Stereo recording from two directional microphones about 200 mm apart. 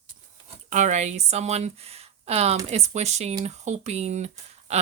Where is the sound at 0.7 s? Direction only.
35° right (ahead or behind).